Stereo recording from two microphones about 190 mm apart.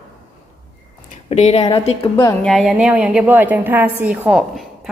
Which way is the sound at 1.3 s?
35° left (ahead or behind).